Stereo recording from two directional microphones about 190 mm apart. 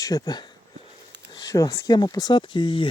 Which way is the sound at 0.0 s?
20° left (ahead or behind).